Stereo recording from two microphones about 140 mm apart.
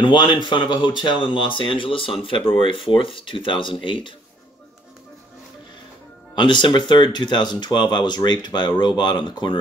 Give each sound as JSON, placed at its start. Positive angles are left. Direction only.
{"t": 0.0, "sound": "speech", "side_deg": 35}
{"t": 6.3, "sound": "speech", "side_deg": 35}